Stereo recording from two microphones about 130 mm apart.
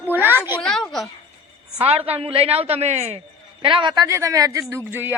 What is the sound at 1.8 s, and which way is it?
A woman's voice, 50° right (ahead or behind).